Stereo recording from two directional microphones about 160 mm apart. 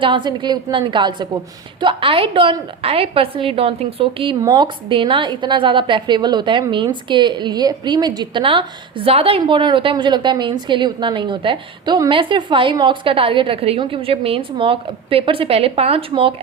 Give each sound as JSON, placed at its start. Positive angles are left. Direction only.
{"t": 0.0, "sound": "a woman's voice", "side_deg": -30}
{"t": 4.4, "sound": "a woman's voice", "side_deg": -25}